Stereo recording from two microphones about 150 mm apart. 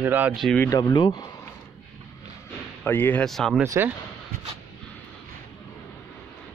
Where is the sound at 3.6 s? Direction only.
20° right (ahead or behind).